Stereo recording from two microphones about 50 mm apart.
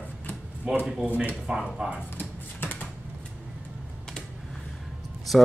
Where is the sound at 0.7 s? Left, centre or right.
Centre.